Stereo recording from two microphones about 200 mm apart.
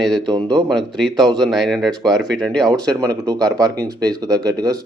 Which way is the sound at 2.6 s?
20° right (ahead or behind).